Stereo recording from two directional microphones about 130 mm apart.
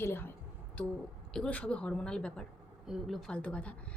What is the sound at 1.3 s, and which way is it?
A woman's voice, 10° left (ahead or behind).